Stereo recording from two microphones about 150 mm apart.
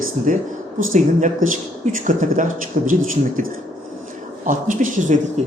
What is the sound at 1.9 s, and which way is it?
Speech, 60° right (ahead or behind).